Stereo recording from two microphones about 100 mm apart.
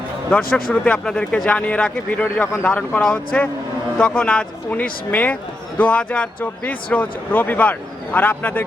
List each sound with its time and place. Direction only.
0.3 s a man's voice: 10° left (ahead or behind)